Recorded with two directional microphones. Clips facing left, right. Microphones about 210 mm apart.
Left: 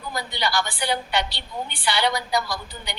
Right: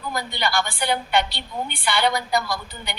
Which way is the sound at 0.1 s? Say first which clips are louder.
Right 1 dB; 55° right (ahead or behind).